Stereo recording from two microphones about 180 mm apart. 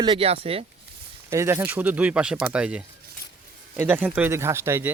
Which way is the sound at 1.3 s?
15° right (ahead or behind).